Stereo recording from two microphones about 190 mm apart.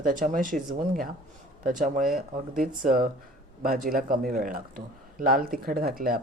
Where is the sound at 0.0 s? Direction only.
45° right (ahead or behind).